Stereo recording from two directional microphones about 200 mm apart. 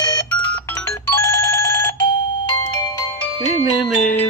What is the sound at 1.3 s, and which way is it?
Telephone bell ringing, 15° left (ahead or behind).